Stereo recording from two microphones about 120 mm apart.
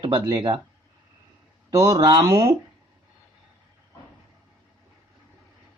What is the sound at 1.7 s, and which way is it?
Speech, 30° right (ahead or behind).